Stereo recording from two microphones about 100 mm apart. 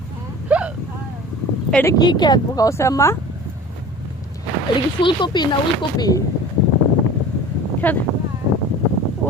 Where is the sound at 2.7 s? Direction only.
30° left (ahead or behind).